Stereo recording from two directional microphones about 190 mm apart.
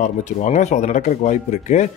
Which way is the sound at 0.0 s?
40° left (ahead or behind).